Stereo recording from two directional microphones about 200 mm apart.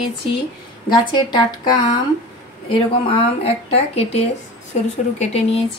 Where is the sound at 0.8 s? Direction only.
20° left (ahead or behind).